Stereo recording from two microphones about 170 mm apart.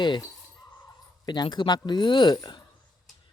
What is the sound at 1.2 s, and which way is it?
Speech, 25° left (ahead or behind).